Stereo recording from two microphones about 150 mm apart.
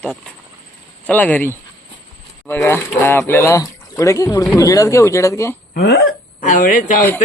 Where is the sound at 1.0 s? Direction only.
10° left (ahead or behind).